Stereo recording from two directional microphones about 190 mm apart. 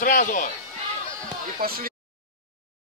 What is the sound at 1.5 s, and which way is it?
Speech, 50° right (ahead or behind).